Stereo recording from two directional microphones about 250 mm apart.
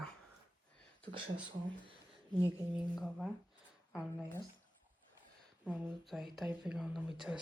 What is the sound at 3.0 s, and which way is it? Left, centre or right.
Speech, centre.